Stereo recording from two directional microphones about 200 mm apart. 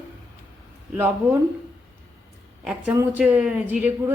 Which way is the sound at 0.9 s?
10° right (ahead or behind).